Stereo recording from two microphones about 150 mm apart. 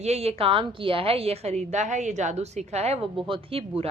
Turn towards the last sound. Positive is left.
turn(degrees=-35)  # may be behind; listen again after turning